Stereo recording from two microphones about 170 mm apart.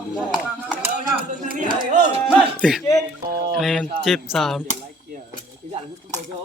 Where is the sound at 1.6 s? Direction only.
30° right (ahead or behind).